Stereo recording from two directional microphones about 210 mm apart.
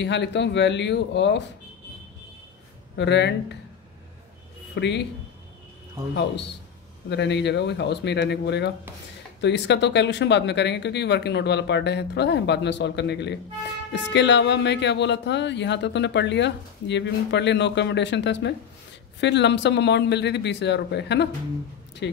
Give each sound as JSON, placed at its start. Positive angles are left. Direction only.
{"t": 0.0, "sound": "speech", "side_deg": 55}
{"t": 3.0, "sound": "speech", "side_deg": 55}
{"t": 4.7, "sound": "speech", "side_deg": 55}
{"t": 7.1, "sound": "speech", "side_deg": 55}